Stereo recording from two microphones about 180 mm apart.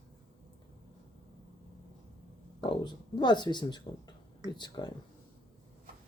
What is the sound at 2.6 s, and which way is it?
Speech, 25° left (ahead or behind).